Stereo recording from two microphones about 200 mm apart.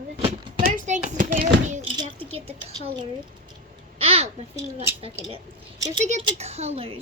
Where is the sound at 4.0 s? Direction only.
30° right (ahead or behind).